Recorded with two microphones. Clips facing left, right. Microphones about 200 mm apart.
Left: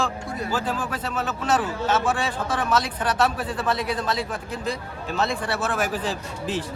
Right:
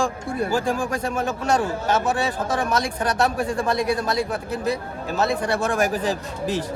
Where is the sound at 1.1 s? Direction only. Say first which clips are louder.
Right 1 dB; 10° right (ahead or behind).